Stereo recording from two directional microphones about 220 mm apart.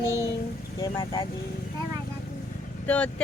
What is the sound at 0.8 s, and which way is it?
Speech, 20° left (ahead or behind).